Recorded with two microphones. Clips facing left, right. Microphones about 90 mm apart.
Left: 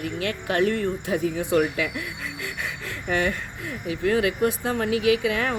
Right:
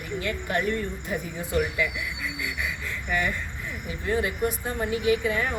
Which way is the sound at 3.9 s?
90° left.